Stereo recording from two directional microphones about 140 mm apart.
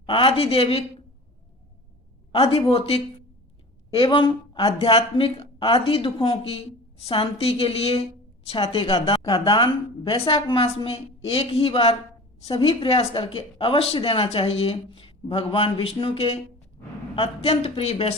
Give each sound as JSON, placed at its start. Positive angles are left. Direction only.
{"t": 0.0, "sound": "speech", "side_deg": 40}
{"t": 2.3, "sound": "a woman's voice", "side_deg": 40}